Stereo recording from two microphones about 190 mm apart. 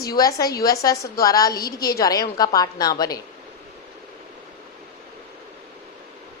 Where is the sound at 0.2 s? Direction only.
20° left (ahead or behind).